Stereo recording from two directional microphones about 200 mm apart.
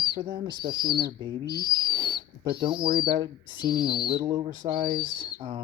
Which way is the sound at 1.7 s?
20° right (ahead or behind).